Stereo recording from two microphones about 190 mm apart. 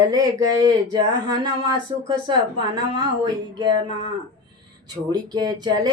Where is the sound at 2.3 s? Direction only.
25° right (ahead or behind).